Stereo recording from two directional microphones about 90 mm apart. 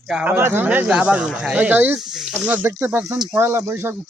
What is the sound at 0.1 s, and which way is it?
Speech, 10° right (ahead or behind).